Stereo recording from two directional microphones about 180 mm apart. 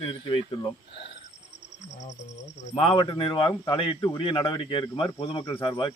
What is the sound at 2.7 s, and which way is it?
Speech, 30° left (ahead or behind).